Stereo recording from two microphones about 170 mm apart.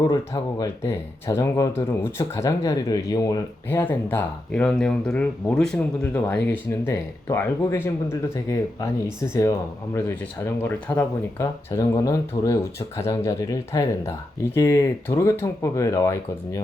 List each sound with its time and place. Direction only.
0.6 s speech: 15° left (ahead or behind)